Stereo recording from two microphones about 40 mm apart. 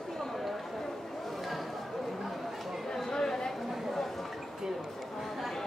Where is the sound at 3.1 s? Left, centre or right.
Centre.